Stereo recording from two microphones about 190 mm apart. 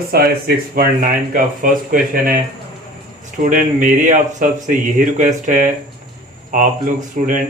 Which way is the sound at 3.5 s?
45° right (ahead or behind).